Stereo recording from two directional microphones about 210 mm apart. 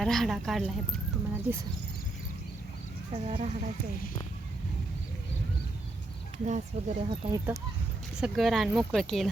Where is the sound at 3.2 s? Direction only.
30° right (ahead or behind).